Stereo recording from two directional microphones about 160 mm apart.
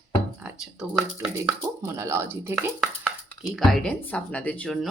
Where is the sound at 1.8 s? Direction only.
20° right (ahead or behind).